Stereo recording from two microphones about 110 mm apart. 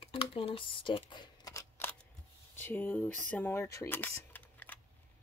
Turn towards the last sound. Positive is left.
turn(degrees=15)  # may be behind; listen again after turning